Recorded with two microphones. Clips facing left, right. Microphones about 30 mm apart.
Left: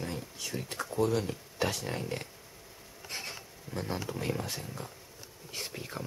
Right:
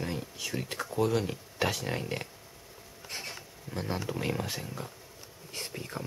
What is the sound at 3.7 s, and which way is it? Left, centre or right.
Speech, centre.